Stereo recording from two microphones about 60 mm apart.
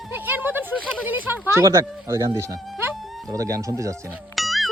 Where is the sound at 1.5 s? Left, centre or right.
Right.